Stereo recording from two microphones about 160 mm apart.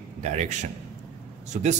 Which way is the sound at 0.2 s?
45° right (ahead or behind).